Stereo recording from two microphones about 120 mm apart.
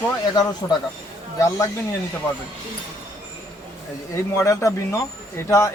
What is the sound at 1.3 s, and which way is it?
Speech, 25° left (ahead or behind).